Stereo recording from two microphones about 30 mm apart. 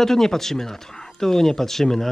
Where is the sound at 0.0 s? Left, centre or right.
Centre.